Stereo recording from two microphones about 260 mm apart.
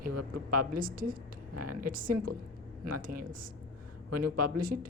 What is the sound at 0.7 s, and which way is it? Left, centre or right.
A woman's voice, right.